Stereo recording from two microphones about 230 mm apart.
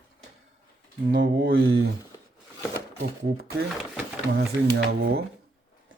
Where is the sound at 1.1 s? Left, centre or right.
Right.